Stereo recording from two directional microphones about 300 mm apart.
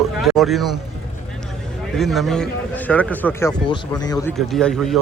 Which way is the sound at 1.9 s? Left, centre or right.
Centre.